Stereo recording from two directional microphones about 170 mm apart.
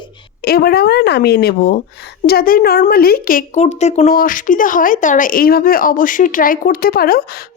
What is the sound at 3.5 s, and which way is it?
Speech, 40° left (ahead or behind).